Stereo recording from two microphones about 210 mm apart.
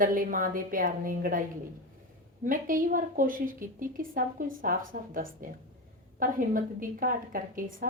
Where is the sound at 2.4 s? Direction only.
40° right (ahead or behind).